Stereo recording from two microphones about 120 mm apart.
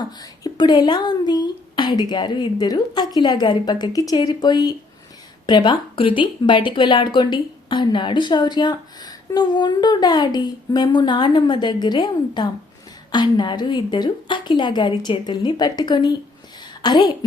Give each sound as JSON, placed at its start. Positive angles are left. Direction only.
{"t": 0.2, "sound": "speech", "side_deg": 35}